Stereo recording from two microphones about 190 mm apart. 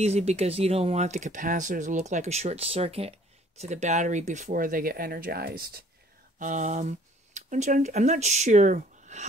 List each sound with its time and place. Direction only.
0.0 s speech: 35° right (ahead or behind); by 5.8 s 50° right (ahead or behind)
6.4 s speech: 40° right (ahead or behind)